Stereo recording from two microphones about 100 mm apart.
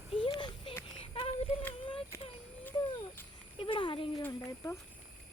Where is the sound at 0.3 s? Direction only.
55° left (ahead or behind).